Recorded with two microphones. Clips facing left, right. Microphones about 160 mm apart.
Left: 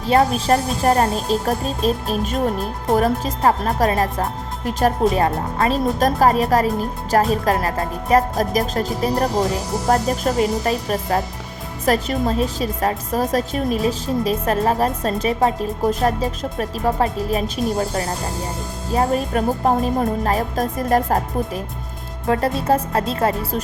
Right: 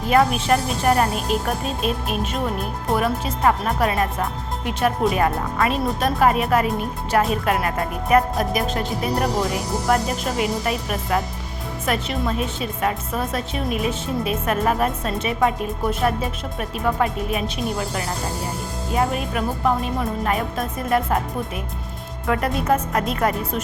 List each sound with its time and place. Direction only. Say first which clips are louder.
0.0 s a woman's voice: left 1 dB; 30° left (ahead or behind)